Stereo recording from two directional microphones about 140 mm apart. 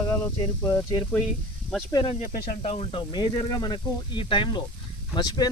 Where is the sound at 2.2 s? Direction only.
80° left.